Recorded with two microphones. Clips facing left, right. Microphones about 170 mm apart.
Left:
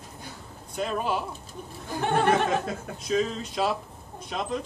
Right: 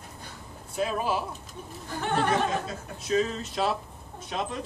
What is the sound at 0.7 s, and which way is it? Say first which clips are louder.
Speech: even; 5° right (ahead or behind).